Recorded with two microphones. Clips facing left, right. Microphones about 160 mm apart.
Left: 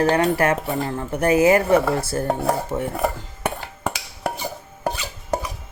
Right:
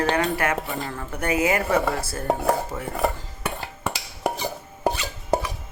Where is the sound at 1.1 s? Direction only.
30° left (ahead or behind).